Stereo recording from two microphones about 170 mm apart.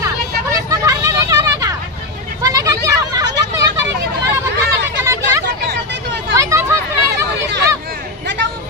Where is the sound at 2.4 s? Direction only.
20° right (ahead or behind).